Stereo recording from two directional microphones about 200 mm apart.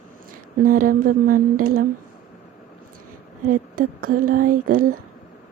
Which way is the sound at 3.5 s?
45° right (ahead or behind).